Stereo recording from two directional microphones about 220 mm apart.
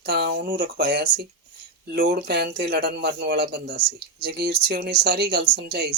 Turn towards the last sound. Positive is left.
turn(degrees=-50)  # may be behind; listen again after turning